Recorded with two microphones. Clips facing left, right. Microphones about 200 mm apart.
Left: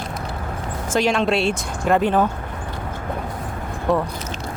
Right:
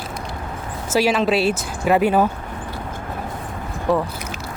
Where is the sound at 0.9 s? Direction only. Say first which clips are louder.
Right 1 dB; 5° right (ahead or behind).